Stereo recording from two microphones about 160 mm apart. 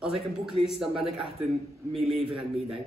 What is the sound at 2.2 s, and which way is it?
Speech, 35° right (ahead or behind).